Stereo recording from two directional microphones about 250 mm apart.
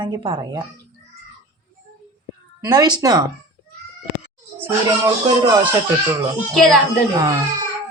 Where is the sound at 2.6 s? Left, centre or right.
Centre.